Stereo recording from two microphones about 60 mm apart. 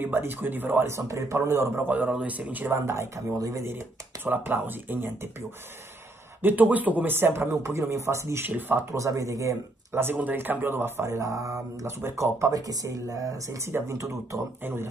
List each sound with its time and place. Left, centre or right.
0.0 s speech: right
0.8 s speech: right
1.9 s speech: right
2.7 s speech: right
3.6 s speech: right
6.4 s speech: right
7.2 s speech: right
7.9 s speech: right
8.5 s speech: right
8.9 s speech: right
10.1 s speech: right
11.0 s speech: right
12.4 s speech: right
13.7 s speech: right